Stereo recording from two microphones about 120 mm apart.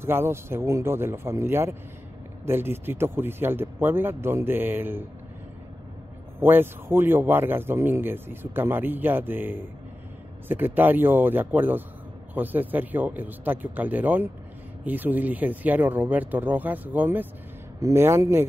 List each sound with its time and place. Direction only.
0.0 s speech: 20° right (ahead or behind)
6.4 s a man's voice: 20° right (ahead or behind)